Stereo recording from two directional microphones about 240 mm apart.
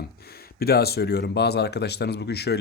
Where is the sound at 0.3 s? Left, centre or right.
Left.